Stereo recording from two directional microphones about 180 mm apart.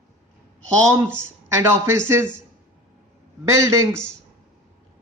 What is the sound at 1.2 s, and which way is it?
A man's voice, 15° right (ahead or behind).